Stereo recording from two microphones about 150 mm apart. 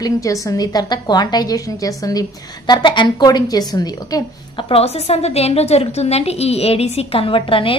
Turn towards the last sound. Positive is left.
turn(degrees=35)  # may be behind; listen again after turning